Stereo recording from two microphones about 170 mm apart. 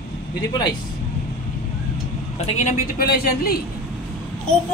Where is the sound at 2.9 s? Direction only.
65° left (ahead or behind).